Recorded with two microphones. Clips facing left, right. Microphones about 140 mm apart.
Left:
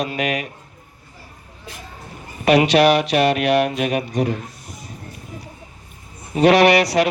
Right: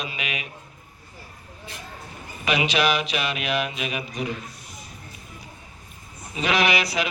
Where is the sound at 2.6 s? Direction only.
80° left.